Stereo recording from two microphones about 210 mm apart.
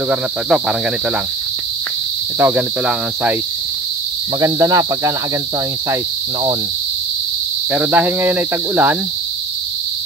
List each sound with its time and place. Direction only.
0.1 s speech: 5° right (ahead or behind)
2.3 s speech: 10° right (ahead or behind)
4.4 s speech: 15° right (ahead or behind)
7.7 s speech: 5° right (ahead or behind)